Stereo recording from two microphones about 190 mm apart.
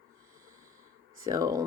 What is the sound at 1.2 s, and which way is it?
Speech, 20° right (ahead or behind).